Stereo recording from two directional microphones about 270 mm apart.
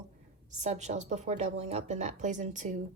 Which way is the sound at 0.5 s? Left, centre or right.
Right.